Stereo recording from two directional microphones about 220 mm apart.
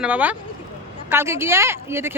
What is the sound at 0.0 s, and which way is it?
A woman's voice, 5° right (ahead or behind).